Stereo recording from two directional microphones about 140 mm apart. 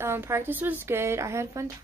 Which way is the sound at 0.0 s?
20° right (ahead or behind).